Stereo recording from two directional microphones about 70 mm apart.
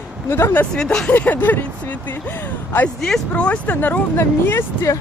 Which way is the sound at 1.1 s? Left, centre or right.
Left.